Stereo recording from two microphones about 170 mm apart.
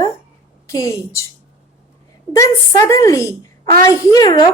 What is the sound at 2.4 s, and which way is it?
A woman's voice, 20° left (ahead or behind).